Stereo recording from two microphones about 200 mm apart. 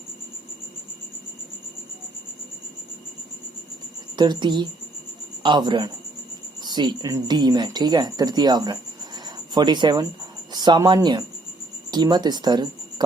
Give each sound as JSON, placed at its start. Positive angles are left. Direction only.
{"t": 4.2, "sound": "speech", "side_deg": -20}